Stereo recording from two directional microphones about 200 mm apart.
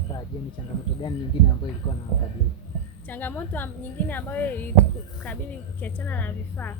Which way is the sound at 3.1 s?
10° left (ahead or behind).